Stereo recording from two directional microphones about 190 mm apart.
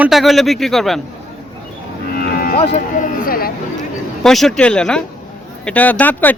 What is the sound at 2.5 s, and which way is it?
Speech, 35° left (ahead or behind).